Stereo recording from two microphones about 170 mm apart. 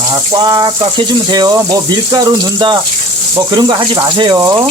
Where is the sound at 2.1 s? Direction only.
25° right (ahead or behind).